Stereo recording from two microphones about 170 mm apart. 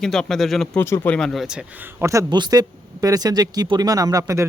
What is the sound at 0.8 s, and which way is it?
Speech, 15° left (ahead or behind).